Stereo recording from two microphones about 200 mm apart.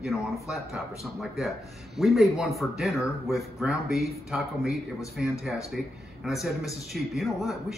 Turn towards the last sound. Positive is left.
turn(degrees=0)  # may be behind; listen again after turning